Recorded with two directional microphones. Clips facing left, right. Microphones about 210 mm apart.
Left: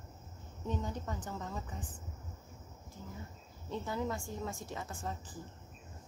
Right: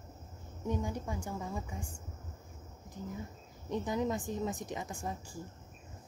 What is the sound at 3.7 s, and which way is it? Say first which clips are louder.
Speech: right 4 dB; 15° right (ahead or behind).